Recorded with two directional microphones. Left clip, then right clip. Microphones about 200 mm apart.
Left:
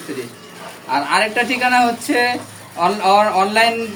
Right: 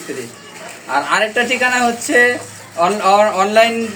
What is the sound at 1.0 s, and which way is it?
Speech, 20° left (ahead or behind).